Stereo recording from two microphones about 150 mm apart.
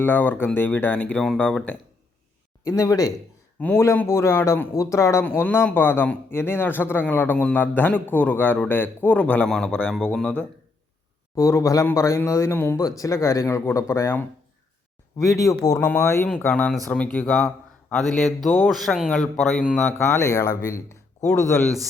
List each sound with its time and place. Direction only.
0.0 s a man's voice: 15° left (ahead or behind)
2.6 s a man's voice: 20° left (ahead or behind)
11.3 s a man's voice: 20° left (ahead or behind); by 20.0 s 5° left (ahead or behind)
20.0 s speech: 20° left (ahead or behind)